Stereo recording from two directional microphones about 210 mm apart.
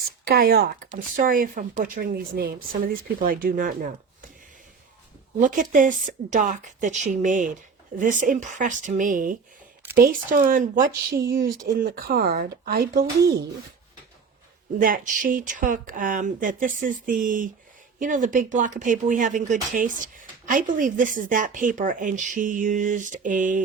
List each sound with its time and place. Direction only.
0.3 s speech: 45° right (ahead or behind)
5.4 s speech: 40° right (ahead or behind)
11.1 s speech: 15° right (ahead or behind)
11.6 s speech: 45° right (ahead or behind)
14.8 s speech: 40° right (ahead or behind)